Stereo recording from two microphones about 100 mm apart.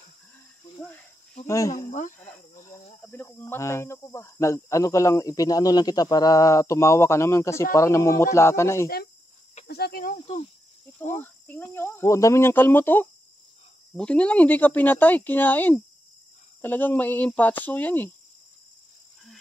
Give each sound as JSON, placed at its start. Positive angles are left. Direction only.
{"t": 1.5, "sound": "speech", "side_deg": 35}
{"t": 2.1, "sound": "speech", "side_deg": 15}
{"t": 10.1, "sound": "speech", "side_deg": 90}
{"t": 11.0, "sound": "speech", "side_deg": 20}